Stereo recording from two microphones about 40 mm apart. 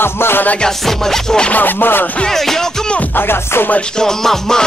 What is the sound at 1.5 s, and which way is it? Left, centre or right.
Rapping, left.